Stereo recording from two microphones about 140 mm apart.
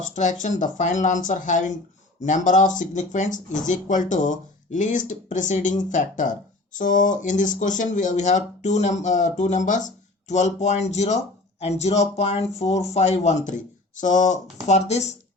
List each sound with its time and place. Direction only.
0.0 s speech: 60° left (ahead or behind)
14.7 s speech: 50° left (ahead or behind)